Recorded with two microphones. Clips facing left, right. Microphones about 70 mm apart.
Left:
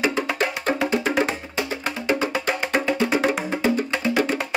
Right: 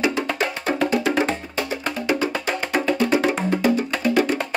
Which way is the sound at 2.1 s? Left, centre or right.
Centre.